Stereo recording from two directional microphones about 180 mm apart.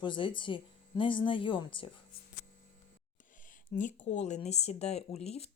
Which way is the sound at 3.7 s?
45° left (ahead or behind).